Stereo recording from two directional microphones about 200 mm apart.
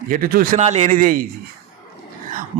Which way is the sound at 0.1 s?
45° right (ahead or behind).